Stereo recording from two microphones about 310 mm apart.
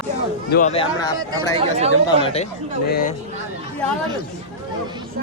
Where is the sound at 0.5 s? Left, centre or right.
Left.